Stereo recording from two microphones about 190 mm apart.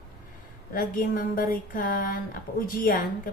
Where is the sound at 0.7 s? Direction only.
50° left (ahead or behind).